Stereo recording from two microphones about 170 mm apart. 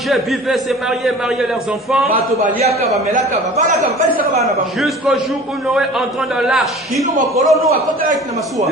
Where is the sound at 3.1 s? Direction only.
45° right (ahead or behind).